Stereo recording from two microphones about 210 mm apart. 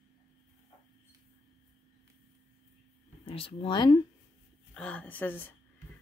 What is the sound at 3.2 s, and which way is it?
Speech, 25° left (ahead or behind).